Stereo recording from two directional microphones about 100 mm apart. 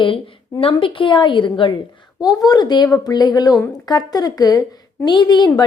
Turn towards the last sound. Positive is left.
turn(degrees=50)  # may be behind; listen again after turning